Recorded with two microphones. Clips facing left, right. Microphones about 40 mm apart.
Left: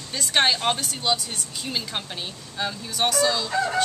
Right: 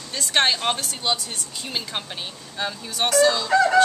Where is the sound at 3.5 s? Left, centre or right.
Right.